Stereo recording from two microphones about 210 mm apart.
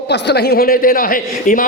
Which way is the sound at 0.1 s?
50° left (ahead or behind).